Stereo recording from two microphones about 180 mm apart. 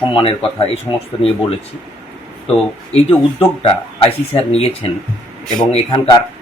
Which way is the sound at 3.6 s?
30° left (ahead or behind).